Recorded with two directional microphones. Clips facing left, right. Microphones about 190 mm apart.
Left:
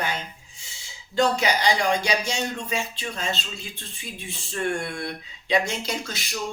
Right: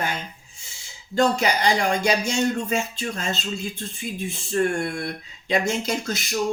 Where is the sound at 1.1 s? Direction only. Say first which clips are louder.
Right 1 dB; 45° right (ahead or behind).